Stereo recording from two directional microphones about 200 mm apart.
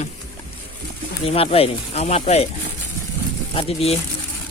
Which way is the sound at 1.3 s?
30° left (ahead or behind).